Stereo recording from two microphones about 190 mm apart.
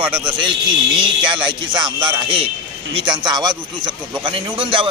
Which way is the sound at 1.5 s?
25° right (ahead or behind).